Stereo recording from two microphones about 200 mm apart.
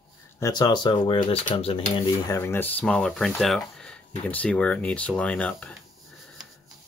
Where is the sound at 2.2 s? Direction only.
15° left (ahead or behind).